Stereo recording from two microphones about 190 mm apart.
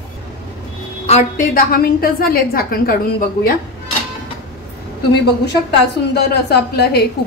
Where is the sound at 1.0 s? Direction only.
40° left (ahead or behind).